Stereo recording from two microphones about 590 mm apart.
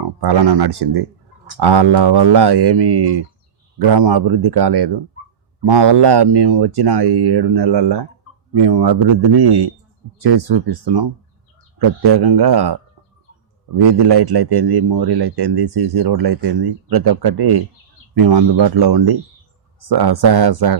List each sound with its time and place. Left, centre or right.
0.0 s a man's voice: right
12.0 s a man's voice: right
13.7 s a man's voice: right